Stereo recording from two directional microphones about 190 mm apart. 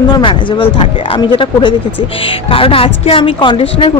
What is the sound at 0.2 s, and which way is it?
A woman's voice, 25° left (ahead or behind).